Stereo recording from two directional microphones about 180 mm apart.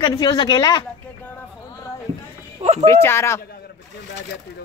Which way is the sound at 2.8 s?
15° left (ahead or behind).